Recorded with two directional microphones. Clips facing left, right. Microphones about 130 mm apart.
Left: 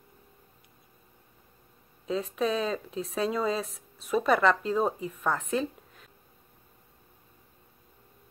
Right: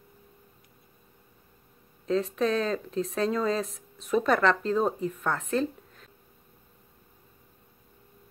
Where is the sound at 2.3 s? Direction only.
5° left (ahead or behind).